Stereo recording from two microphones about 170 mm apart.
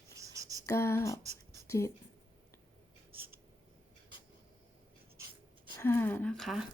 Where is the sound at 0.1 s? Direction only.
20° right (ahead or behind).